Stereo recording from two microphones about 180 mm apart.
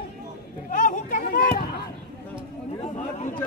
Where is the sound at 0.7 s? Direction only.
45° left (ahead or behind).